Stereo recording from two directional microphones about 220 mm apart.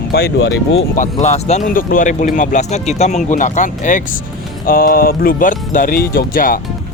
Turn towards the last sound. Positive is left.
turn(degrees=40)  # may be behind; listen again after turning